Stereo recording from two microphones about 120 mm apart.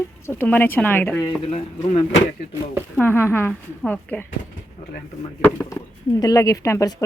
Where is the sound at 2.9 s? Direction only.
20° left (ahead or behind).